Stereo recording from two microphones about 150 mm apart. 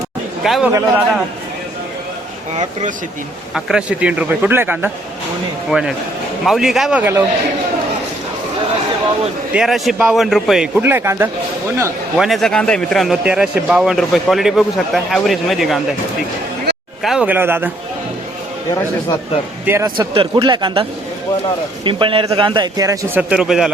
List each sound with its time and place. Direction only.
0.4 s speech: centre (ahead or behind)
0.7 s speech: 20° right (ahead or behind)
3.5 s a man's voice: 5° right (ahead or behind)
7.0 s a man's voice: 15° right (ahead or behind)
9.5 s speech: 5° right (ahead or behind)
12.1 s speech: centre (ahead or behind)
17.0 s a man's voice: 5° right (ahead or behind)
19.6 s a man's voice: 15° right (ahead or behind)
20.0 s speech: 30° right (ahead or behind)
21.8 s a man's voice: 35° right (ahead or behind)
23.3 s speech: 5° right (ahead or behind)